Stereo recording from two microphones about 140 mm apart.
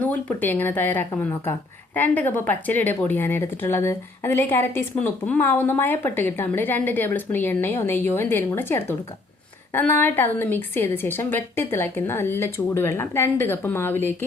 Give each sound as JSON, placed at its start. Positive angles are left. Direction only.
{"t": 0.0, "sound": "a woman's voice", "side_deg": 10}